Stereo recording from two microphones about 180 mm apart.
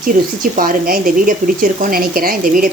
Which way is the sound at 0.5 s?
50° right (ahead or behind).